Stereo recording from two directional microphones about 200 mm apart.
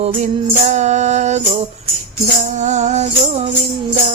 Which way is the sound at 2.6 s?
35° right (ahead or behind).